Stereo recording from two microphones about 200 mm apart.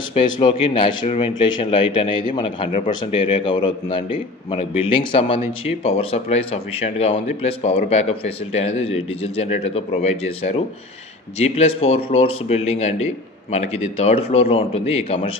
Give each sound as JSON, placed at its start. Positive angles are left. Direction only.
{"t": 0.1, "sound": "a man's voice", "side_deg": 25}